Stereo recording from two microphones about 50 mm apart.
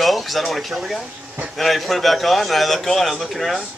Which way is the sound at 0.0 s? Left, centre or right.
Centre.